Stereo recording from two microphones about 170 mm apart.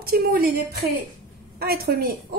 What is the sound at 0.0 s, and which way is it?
A woman's voice, 60° right (ahead or behind).